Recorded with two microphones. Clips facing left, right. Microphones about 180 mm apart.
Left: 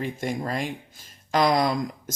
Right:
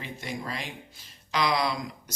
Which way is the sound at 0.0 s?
50° left (ahead or behind).